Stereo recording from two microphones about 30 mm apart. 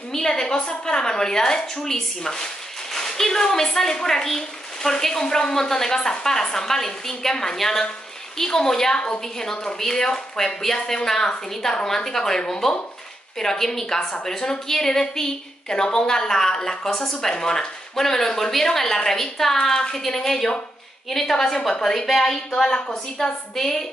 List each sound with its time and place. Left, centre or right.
0.1 s a woman's voice: centre
22.7 s a woman's voice: left